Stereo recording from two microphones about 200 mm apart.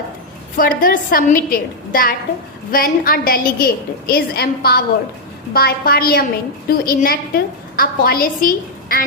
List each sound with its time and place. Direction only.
0.5 s a woman's voice: 45° left (ahead or behind)